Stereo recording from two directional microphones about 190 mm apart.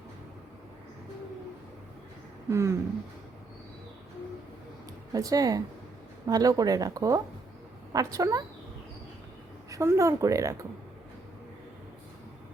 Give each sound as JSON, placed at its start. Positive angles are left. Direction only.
{"t": 2.5, "sound": "a woman's voice", "side_deg": -15}
{"t": 5.1, "sound": "a woman's voice", "side_deg": -20}
{"t": 9.6, "sound": "a woman's voice", "side_deg": -15}